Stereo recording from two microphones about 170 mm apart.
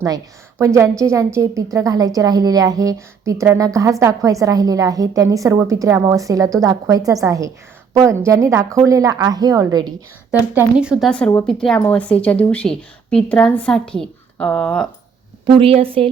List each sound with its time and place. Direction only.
0.6 s a woman's voice: 15° right (ahead or behind)
10.5 s a woman's voice: 10° right (ahead or behind)
15.4 s a woman's voice: 30° right (ahead or behind)